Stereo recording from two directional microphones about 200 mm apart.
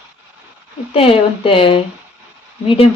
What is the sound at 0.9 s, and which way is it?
Speech, 25° left (ahead or behind).